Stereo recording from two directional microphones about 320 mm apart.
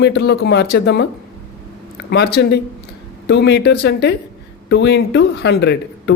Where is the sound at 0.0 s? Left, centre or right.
Left.